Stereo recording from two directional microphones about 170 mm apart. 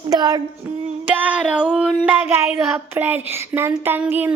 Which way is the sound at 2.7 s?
10° right (ahead or behind).